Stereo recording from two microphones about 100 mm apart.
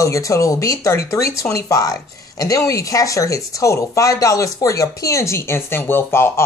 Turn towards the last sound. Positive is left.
turn(degrees=25)  # may be behind; listen again after turning